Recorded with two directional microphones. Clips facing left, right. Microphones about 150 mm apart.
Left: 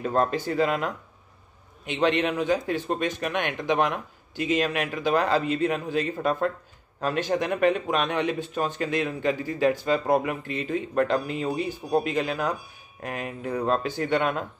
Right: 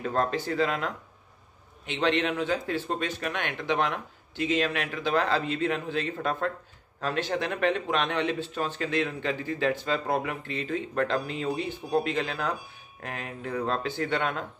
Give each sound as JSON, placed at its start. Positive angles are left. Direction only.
{"t": 0.0, "sound": "a man's voice", "side_deg": 20}